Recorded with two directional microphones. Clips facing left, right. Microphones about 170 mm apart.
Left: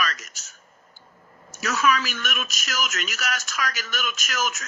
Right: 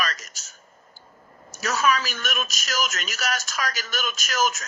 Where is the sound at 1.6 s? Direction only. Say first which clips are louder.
Even; 35° right (ahead or behind).